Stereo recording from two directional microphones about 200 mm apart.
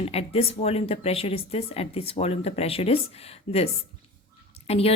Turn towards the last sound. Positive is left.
turn(degrees=30)  # may be behind; listen again after turning